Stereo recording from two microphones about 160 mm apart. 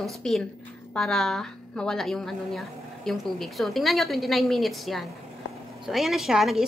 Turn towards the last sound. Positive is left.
turn(degrees=0)  # may be behind; listen again after turning